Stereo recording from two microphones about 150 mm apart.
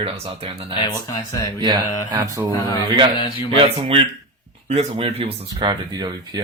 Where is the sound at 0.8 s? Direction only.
25° left (ahead or behind).